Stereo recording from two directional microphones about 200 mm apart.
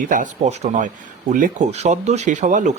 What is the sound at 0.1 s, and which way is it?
Speech, 35° right (ahead or behind).